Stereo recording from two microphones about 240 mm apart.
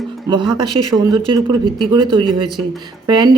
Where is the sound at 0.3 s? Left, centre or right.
Centre.